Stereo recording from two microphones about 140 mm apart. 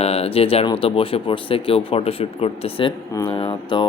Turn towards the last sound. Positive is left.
turn(degrees=40)  # may be behind; listen again after turning